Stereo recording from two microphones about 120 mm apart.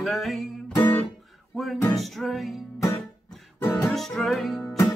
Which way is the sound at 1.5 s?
Centre (ahead or behind).